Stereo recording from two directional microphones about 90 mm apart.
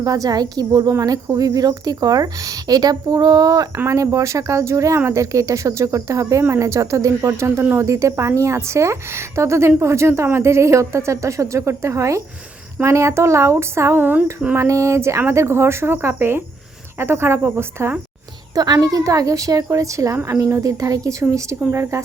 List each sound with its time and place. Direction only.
0.0 s a woman's voice: 45° right (ahead or behind); by 14.3 s 20° right (ahead or behind)
14.5 s speech: 30° right (ahead or behind)
18.5 s a woman's voice: 45° right (ahead or behind)